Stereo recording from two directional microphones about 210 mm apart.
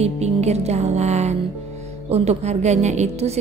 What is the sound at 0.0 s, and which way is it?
A woman's voice, 30° right (ahead or behind).